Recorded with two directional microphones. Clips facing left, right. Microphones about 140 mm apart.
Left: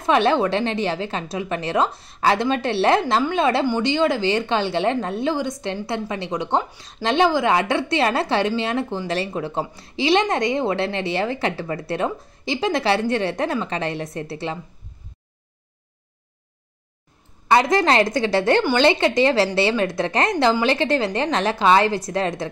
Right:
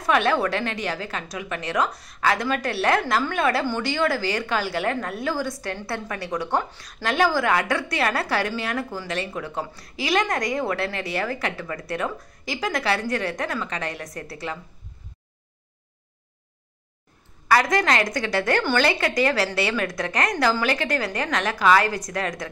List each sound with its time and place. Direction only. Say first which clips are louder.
0.0 s a woman's voice: left 3 dB; 25° left (ahead or behind)
17.5 s a woman's voice: left 3 dB; 25° left (ahead or behind)